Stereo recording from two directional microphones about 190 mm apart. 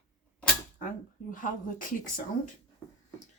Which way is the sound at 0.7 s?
45° left (ahead or behind).